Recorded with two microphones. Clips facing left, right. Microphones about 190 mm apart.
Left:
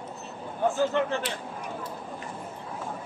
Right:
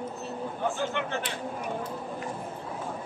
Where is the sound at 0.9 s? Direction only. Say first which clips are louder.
Left 5 dB; 35° left (ahead or behind).